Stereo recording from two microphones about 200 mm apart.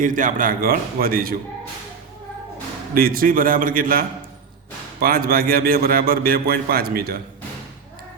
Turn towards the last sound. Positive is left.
turn(degrees=-50)  # may be behind; listen again after turning